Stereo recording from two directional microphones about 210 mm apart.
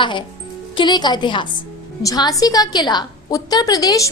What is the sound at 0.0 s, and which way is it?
A woman's voice, 20° left (ahead or behind).